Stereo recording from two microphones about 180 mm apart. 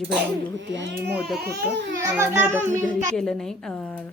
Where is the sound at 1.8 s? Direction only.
90° right.